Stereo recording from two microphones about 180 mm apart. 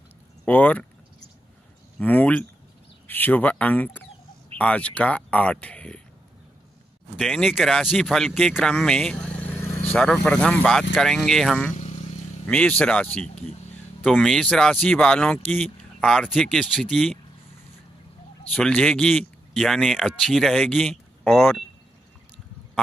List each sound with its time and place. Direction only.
0.5 s speech: 10° left (ahead or behind)
2.0 s speech: 10° left (ahead or behind)
7.2 s speech: centre (ahead or behind)
11.7 s vehicle: 40° left (ahead or behind)
12.4 s speech: 5° left (ahead or behind)
18.5 s speech: 5° left (ahead or behind)